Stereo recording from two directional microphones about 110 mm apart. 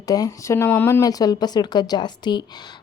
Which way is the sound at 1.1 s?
35° left (ahead or behind).